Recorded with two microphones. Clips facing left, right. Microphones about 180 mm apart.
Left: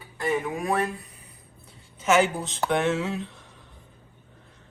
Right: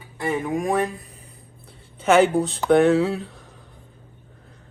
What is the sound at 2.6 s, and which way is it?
Speech, 35° right (ahead or behind).